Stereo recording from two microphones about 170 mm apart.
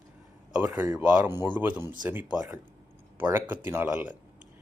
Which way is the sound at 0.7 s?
20° right (ahead or behind).